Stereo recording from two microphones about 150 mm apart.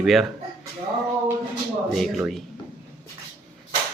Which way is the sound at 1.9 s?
Centre (ahead or behind).